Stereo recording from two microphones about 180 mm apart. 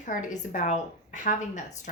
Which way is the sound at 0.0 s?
45° left (ahead or behind).